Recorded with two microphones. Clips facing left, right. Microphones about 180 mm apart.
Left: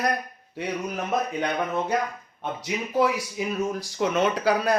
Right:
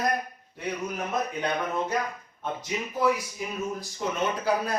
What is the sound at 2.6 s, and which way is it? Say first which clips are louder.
Speech: left 4 dB; 85° left.